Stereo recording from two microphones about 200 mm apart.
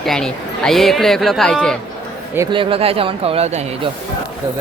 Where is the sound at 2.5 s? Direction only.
25° right (ahead or behind).